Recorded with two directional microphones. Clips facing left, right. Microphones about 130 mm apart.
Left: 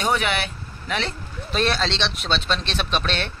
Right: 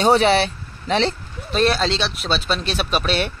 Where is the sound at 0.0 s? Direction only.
30° right (ahead or behind).